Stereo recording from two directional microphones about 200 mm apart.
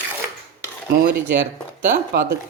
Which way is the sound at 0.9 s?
55° right (ahead or behind).